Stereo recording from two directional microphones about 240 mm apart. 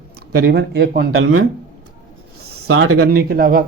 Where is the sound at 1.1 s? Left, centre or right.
Right.